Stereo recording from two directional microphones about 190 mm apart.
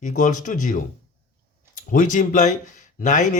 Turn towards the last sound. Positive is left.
turn(degrees=40)  # may be behind; listen again after turning